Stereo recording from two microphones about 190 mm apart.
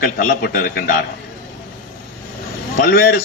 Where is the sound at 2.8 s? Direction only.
55° left (ahead or behind).